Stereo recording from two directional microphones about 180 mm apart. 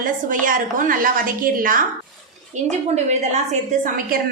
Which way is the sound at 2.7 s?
40° right (ahead or behind).